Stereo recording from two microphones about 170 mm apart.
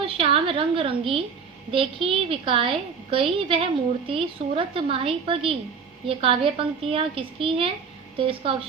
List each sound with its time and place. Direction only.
0.0 s a woman's voice: 35° right (ahead or behind)